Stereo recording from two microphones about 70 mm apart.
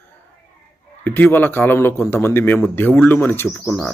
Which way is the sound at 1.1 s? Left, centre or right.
Left.